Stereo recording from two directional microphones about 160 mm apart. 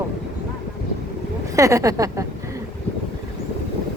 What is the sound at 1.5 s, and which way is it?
Speech, 20° right (ahead or behind).